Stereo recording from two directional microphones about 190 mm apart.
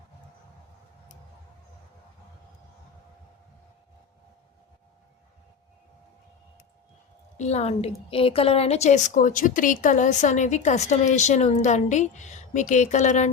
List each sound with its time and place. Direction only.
7.3 s a woman's voice: 35° left (ahead or behind)